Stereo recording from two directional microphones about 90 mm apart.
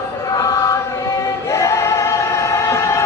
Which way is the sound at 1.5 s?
35° left (ahead or behind).